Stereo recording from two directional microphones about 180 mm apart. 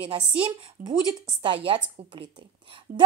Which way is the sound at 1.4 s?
30° right (ahead or behind).